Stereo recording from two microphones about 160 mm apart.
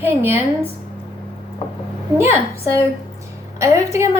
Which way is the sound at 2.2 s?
15° right (ahead or behind).